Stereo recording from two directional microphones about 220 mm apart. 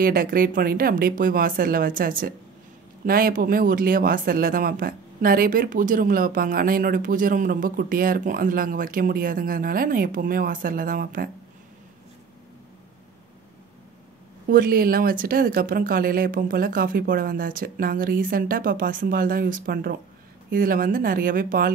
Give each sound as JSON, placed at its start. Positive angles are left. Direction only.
{"t": 0.0, "sound": "speech", "side_deg": -40}
{"t": 14.5, "sound": "speech", "side_deg": -40}